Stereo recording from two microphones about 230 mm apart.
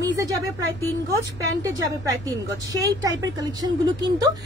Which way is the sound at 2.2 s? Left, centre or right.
Centre.